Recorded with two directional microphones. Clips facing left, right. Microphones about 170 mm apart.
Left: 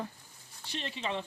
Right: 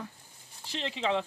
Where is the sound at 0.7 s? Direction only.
90° right.